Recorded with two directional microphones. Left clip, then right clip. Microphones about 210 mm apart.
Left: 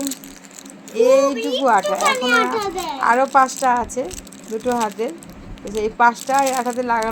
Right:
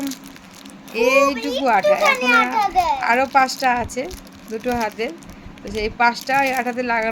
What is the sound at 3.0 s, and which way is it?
A woman's voice, 20° right (ahead or behind).